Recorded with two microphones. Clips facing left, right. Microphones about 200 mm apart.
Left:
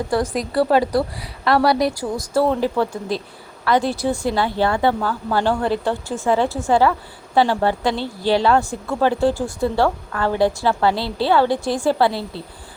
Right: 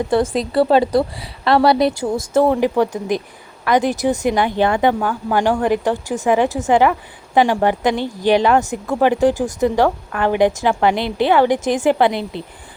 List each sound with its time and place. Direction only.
0.1 s a woman's voice: 25° right (ahead or behind)